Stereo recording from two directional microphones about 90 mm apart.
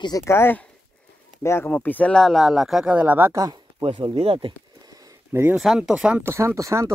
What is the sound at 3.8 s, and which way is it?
Speech, 80° right.